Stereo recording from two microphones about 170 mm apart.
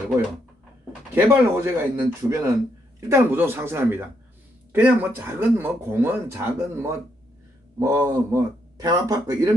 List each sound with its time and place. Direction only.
1.1 s speech: 15° right (ahead or behind)